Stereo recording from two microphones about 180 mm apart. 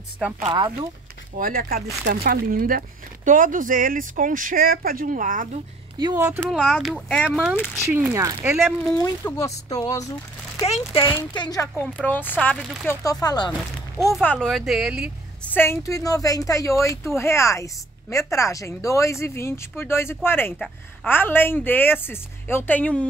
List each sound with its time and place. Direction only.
0.4 s speech: 25° right (ahead or behind)
1.4 s speech: 55° right (ahead or behind)
5.9 s speech: 20° right (ahead or behind)
6.5 s speech: centre (ahead or behind)
7.5 s a woman's voice: 10° left (ahead or behind)
7.9 s speech: 15° right (ahead or behind)
8.9 s speech: 15° left (ahead or behind)
11.8 s a woman's voice: 10° left (ahead or behind)
12.8 s speech: 15° left (ahead or behind)
14.1 s speech: 5° left (ahead or behind)
15.5 s a woman's voice: 15° left (ahead or behind)